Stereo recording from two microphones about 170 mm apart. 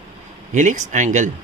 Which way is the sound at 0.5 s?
45° right (ahead or behind).